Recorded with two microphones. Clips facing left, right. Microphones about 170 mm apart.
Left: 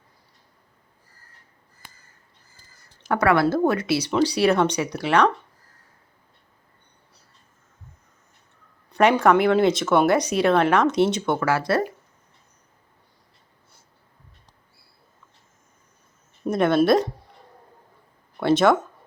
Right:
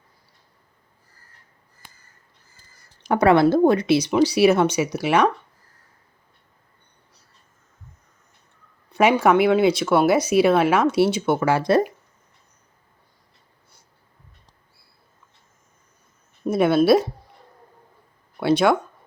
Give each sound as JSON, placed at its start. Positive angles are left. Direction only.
{"t": 3.1, "sound": "speech", "side_deg": -20}
{"t": 8.9, "sound": "speech", "side_deg": -5}
{"t": 11.3, "sound": "speech", "side_deg": -20}
{"t": 16.5, "sound": "speech", "side_deg": -5}
{"t": 18.3, "sound": "speech", "side_deg": 0}